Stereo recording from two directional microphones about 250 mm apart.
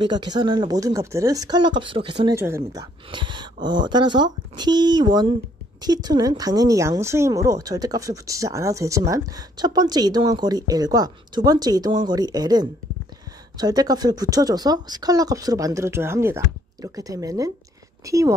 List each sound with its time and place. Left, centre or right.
0.0 s speech: centre